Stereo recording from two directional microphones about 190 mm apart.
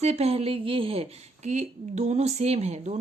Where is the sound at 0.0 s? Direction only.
35° right (ahead or behind).